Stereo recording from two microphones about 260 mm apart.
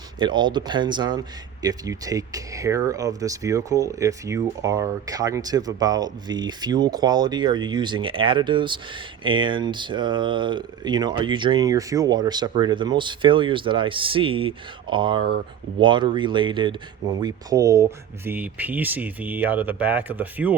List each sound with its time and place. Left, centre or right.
0.2 s speech: centre